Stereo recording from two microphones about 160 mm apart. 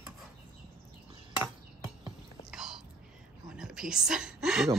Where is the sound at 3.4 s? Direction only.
5° right (ahead or behind).